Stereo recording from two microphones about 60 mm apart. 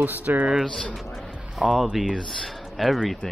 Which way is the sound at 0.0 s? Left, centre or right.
Right.